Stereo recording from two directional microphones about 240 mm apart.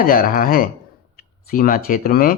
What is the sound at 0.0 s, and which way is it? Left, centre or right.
Speech, left.